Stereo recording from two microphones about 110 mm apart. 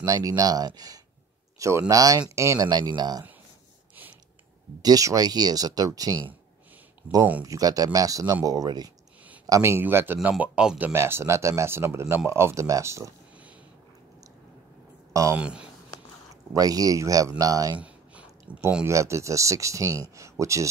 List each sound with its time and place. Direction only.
0.0 s speech: 35° right (ahead or behind)
4.8 s speech: 35° right (ahead or behind)
7.4 s speech: 35° right (ahead or behind)
9.5 s speech: 25° right (ahead or behind); by 10.9 s 10° right (ahead or behind)
10.9 s speech: 20° right (ahead or behind)
15.3 s speech: 10° right (ahead or behind)
16.5 s speech: 35° right (ahead or behind)
17.7 s a sound: 10° right (ahead or behind)
18.9 s speech: 25° right (ahead or behind)